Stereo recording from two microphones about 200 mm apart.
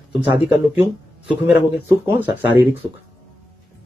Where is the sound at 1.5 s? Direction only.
10° right (ahead or behind).